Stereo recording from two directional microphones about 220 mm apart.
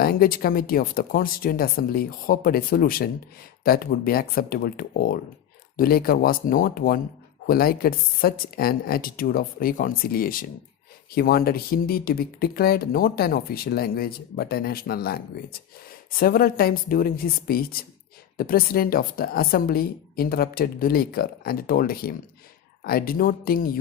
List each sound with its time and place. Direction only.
0.0 s speech: 40° left (ahead or behind)